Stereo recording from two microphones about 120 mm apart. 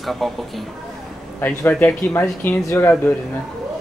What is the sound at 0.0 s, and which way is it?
Speech, centre (ahead or behind).